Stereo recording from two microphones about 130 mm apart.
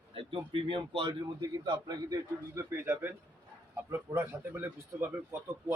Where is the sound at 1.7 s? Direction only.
30° right (ahead or behind).